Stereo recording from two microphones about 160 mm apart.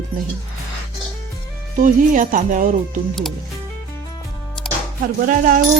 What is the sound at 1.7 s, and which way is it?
Speech, 55° right (ahead or behind).